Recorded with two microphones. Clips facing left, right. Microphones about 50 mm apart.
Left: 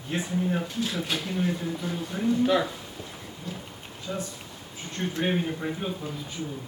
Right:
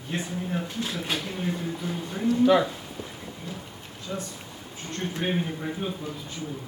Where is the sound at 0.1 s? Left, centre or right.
Centre.